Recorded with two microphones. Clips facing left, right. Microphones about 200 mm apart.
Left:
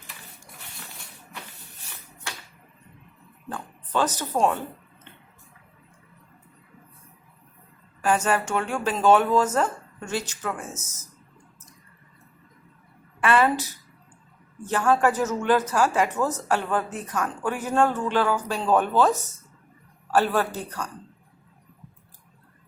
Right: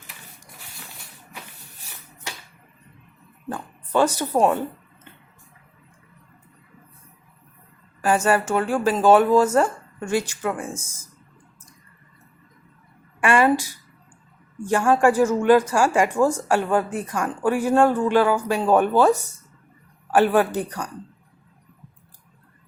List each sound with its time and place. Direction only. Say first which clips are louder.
3.5 s speech: right 5 dB; 10° right (ahead or behind)
8.0 s speech: right 3 dB; 10° right (ahead or behind)
13.1 s a woman's voice: right 3 dB; 15° right (ahead or behind)